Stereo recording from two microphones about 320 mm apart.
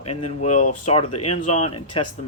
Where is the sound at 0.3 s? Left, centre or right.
Left.